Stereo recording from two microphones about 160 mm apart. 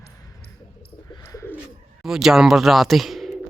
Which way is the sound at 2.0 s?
5° right (ahead or behind).